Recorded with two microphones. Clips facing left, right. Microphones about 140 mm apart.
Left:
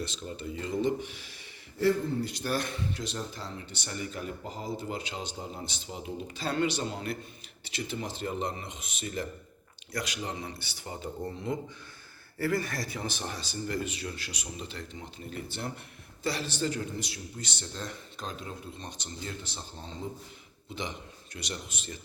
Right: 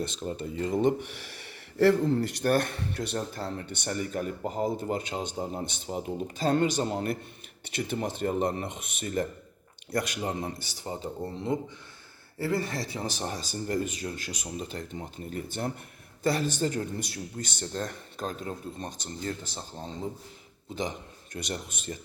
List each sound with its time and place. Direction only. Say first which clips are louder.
0.0 s speech: right 4 dB; 45° right (ahead or behind); by 2.1 s 90° right
2.4 s speech: right 6 dB; 55° right (ahead or behind)
20.7 s speech: right 4 dB; 45° right (ahead or behind)